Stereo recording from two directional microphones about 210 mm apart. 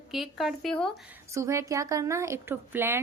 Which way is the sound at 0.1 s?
Centre (ahead or behind).